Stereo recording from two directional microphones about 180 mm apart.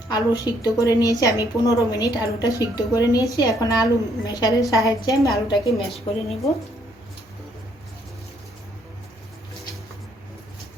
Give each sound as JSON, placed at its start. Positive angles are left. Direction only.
{"t": 0.1, "sound": "a woman's voice", "side_deg": 20}
{"t": 5.7, "sound": "a woman's voice", "side_deg": 0}